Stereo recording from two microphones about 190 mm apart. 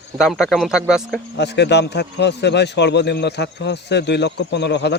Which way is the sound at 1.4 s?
65° left (ahead or behind).